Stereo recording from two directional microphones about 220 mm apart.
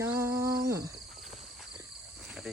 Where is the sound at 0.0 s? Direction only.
10° right (ahead or behind).